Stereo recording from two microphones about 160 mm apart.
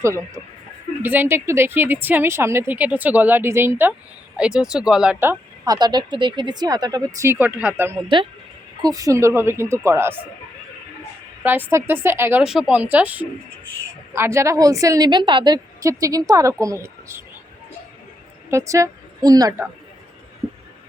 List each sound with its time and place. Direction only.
1.0 s speech: 10° right (ahead or behind)
8.0 s speech: 30° right (ahead or behind); by 10.2 s 15° right (ahead or behind)
11.4 s speech: 10° right (ahead or behind)
18.5 s speech: 20° right (ahead or behind)